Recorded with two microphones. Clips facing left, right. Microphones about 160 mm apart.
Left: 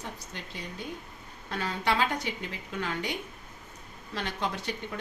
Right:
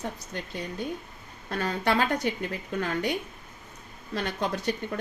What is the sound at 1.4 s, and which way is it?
A woman's voice, 45° right (ahead or behind).